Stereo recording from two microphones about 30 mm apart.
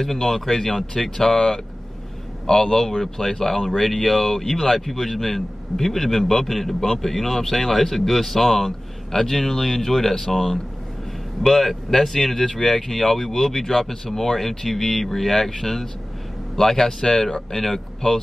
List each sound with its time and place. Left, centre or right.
0.0 s speech: centre
2.4 s speech: centre